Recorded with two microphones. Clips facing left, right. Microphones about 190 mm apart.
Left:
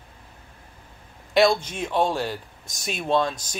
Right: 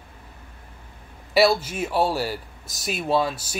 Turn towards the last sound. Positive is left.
turn(degrees=-5)  # may be behind; listen again after turning